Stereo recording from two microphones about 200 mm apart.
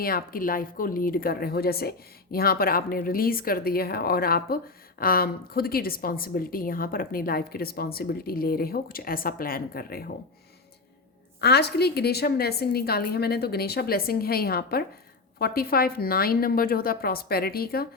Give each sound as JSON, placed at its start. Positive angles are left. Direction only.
{"t": 0.0, "sound": "a woman's voice", "side_deg": 45}
{"t": 11.3, "sound": "a woman's voice", "side_deg": 55}